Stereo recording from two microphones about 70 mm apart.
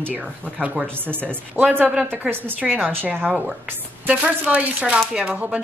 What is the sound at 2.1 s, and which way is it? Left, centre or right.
A woman's voice, right.